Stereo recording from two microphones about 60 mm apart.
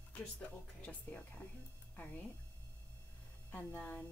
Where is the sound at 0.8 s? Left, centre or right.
Left.